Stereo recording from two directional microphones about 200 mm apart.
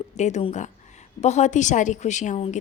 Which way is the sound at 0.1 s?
35° left (ahead or behind).